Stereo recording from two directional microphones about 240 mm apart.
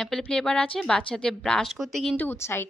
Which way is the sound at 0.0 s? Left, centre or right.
Centre.